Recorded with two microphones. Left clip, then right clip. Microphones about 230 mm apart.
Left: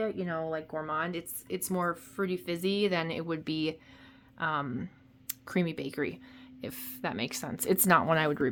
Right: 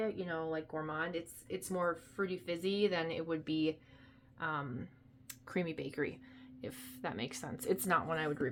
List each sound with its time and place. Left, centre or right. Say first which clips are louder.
0.0 s speech: left 5 dB; left